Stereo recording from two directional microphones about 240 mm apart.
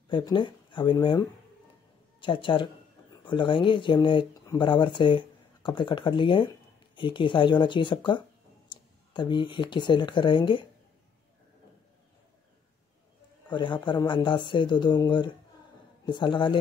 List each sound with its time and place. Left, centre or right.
0.1 s speech: centre
13.5 s speech: centre